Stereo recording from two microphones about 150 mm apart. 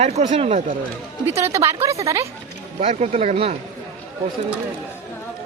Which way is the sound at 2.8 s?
45° right (ahead or behind).